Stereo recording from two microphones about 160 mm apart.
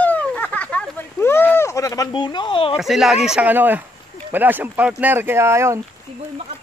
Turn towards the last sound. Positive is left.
turn(degrees=-15)  # may be behind; listen again after turning